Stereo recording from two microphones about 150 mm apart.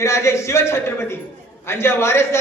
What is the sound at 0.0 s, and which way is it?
A man's voice, 20° left (ahead or behind).